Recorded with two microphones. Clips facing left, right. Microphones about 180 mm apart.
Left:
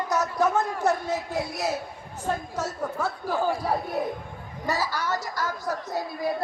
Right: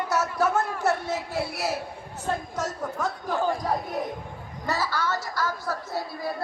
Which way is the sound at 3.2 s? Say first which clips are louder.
Even; 5° left (ahead or behind).